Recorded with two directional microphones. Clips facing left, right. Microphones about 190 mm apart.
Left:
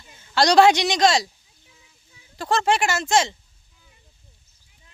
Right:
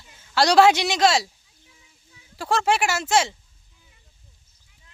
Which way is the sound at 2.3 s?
10° right (ahead or behind).